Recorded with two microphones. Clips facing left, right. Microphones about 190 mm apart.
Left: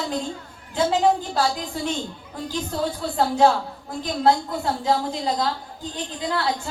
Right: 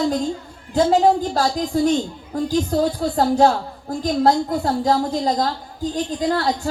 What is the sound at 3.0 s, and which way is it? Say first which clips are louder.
Speech: right 6 dB; 45° right (ahead or behind).